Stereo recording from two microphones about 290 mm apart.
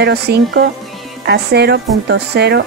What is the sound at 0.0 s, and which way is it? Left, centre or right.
Speech, right.